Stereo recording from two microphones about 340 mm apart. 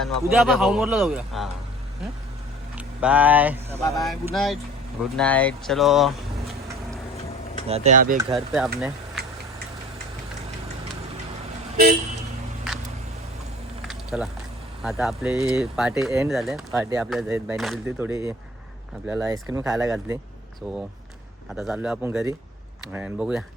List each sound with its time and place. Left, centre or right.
0.0 s speech: centre
2.7 s speech: centre
7.7 s speech: right
8.2 s speech: centre
12.7 s a sound: centre
13.8 s a sound: centre
14.8 s speech: centre
21.5 s speech: centre